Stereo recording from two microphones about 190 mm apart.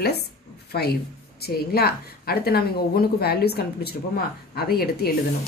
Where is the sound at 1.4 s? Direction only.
55° left (ahead or behind).